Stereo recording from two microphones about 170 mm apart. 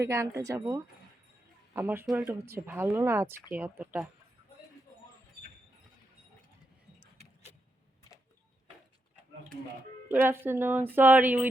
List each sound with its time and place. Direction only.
0.0 s speech: 15° right (ahead or behind)
10.1 s speech: 15° right (ahead or behind)